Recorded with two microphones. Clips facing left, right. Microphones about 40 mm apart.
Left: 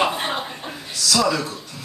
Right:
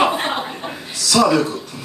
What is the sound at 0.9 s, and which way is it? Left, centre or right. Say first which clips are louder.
Speech: right 5 dB; centre.